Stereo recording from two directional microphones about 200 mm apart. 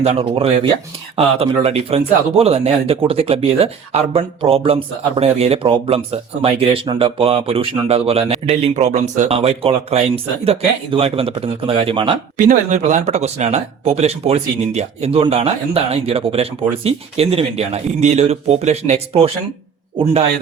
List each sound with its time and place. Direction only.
0.0 s speech: 30° right (ahead or behind)
12.4 s speech: 40° right (ahead or behind)